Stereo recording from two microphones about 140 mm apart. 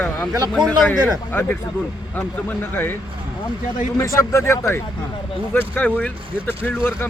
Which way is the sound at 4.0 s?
20° left (ahead or behind).